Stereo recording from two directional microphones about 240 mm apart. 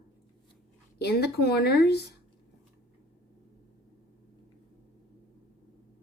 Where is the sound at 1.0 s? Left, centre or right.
Left.